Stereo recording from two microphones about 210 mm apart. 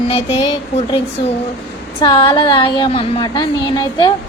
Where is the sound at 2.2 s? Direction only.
25° left (ahead or behind).